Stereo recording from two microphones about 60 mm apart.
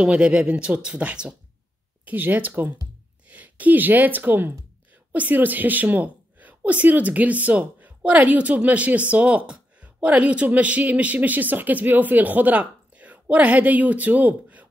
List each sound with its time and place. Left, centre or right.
0.0 s speech: centre
2.0 s a woman's voice: right